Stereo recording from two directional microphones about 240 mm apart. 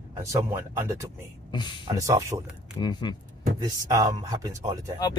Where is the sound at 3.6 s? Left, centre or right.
Centre.